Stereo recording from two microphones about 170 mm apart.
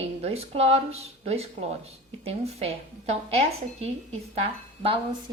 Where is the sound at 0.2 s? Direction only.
35° right (ahead or behind).